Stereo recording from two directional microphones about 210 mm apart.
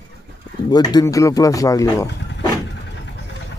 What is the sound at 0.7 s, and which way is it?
Speech, 20° left (ahead or behind).